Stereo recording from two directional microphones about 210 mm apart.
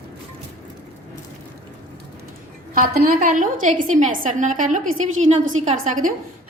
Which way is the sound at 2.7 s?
45° right (ahead or behind).